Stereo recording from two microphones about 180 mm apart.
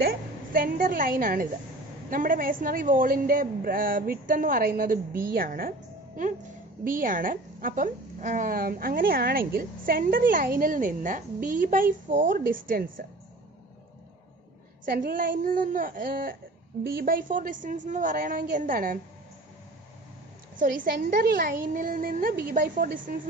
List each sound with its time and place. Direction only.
0.0 s a woman's voice: 55° right (ahead or behind)
14.9 s a woman's voice: 50° right (ahead or behind)
20.5 s a woman's voice: 50° right (ahead or behind)